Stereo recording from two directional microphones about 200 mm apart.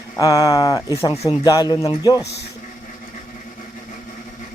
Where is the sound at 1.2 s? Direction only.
20° left (ahead or behind).